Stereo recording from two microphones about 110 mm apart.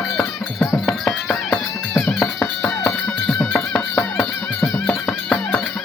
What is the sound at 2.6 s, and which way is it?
Music, 10° left (ahead or behind).